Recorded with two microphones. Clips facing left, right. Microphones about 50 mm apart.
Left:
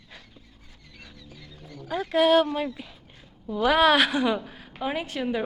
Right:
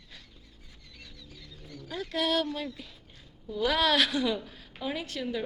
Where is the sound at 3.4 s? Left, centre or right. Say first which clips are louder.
Left 7 dB; left.